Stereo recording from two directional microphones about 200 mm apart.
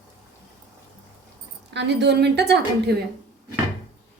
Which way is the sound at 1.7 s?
60° right (ahead or behind).